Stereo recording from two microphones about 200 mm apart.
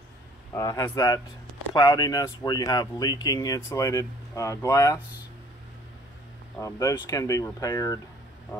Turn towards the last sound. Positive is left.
turn(degrees=15)  # may be behind; listen again after turning